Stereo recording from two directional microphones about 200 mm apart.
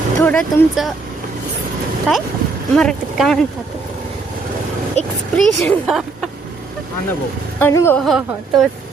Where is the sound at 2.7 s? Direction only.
5° left (ahead or behind).